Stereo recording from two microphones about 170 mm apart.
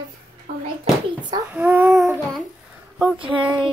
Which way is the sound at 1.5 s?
10° right (ahead or behind).